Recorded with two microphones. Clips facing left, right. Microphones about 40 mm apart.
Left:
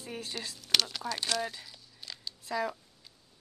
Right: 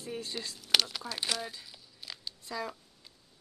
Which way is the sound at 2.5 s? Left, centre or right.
Centre.